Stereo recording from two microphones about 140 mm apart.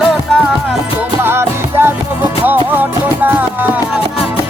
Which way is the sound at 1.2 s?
15° right (ahead or behind).